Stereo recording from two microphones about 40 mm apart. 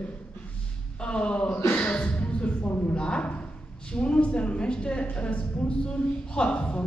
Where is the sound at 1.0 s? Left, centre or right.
Left.